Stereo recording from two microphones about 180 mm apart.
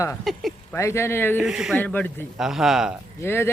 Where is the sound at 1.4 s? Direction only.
5° right (ahead or behind).